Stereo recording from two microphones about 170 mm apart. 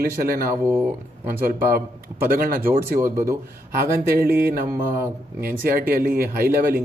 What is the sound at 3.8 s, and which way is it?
A man's voice, 60° right (ahead or behind).